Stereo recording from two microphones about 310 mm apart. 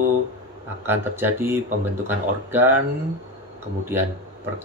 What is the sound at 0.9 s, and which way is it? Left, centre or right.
Speech, centre.